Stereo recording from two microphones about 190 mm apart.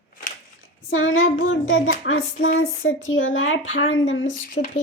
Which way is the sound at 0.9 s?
90° left.